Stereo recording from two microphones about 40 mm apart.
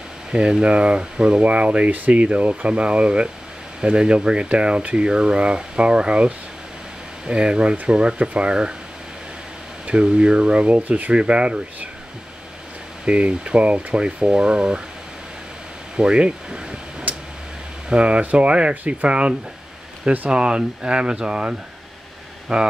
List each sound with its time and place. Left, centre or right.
0.3 s speech: right
1.4 s speech: right
9.8 s speech: right
13.0 s speech: right
16.0 s speech: right
17.8 s speech: right